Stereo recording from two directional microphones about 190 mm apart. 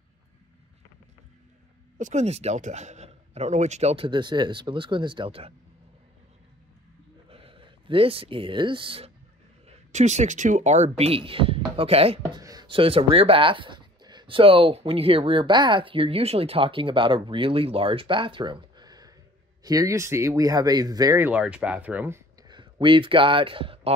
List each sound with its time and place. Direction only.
2.0 s speech: 40° right (ahead or behind)
7.2 s speech: 30° right (ahead or behind)
12.4 s speech: 20° right (ahead or behind)